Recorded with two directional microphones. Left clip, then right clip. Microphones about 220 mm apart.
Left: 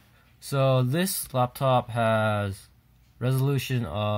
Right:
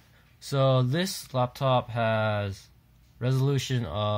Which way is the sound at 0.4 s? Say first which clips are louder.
Left 1 dB; 10° left (ahead or behind).